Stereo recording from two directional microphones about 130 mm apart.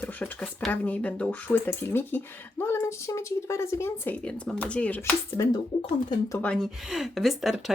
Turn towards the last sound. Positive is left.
turn(degrees=0)  # may be behind; listen again after turning